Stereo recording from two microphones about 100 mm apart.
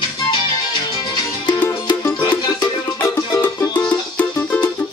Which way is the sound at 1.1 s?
50° left (ahead or behind).